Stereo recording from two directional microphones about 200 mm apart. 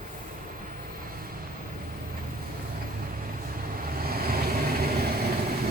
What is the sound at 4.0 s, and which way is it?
Vehicle, 50° right (ahead or behind).